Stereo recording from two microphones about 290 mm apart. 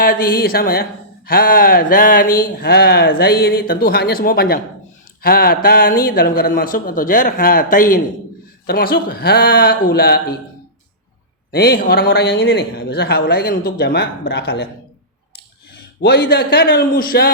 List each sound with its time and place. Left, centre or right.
0.0 s speech: left
11.5 s speech: left
16.0 s speech: left